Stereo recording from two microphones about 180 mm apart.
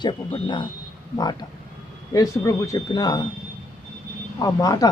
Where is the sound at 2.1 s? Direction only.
20° left (ahead or behind).